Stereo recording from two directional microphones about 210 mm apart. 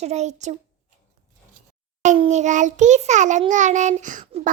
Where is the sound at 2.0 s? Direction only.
35° right (ahead or behind).